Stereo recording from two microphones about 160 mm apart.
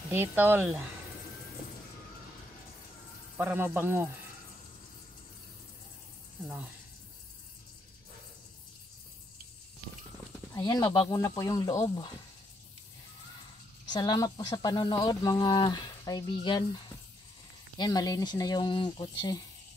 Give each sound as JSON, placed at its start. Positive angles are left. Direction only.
{"t": 0.1, "sound": "speech", "side_deg": -15}
{"t": 3.3, "sound": "speech", "side_deg": -15}
{"t": 10.5, "sound": "speech", "side_deg": 25}
{"t": 13.8, "sound": "speech", "side_deg": 25}